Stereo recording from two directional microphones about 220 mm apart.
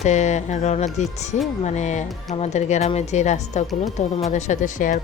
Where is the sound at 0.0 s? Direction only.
30° left (ahead or behind).